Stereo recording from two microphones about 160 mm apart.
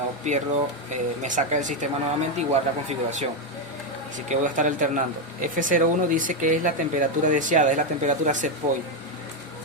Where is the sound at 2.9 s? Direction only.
45° right (ahead or behind).